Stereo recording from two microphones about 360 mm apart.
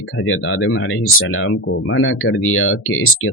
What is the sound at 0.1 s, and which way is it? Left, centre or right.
Speech, left.